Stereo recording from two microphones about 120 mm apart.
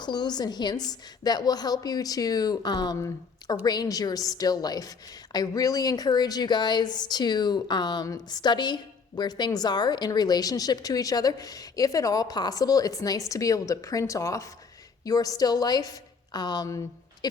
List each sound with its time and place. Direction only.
0.0 s a woman's voice: 35° left (ahead or behind)